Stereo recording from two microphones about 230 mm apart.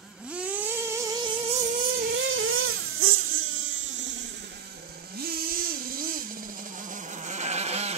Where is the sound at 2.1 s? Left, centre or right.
Right.